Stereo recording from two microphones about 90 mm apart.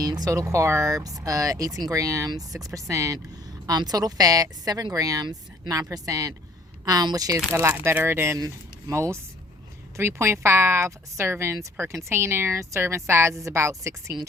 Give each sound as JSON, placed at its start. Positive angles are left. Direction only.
{"t": 0.0, "sound": "a woman's voice", "side_deg": -45}
{"t": 7.5, "sound": "speech", "side_deg": -25}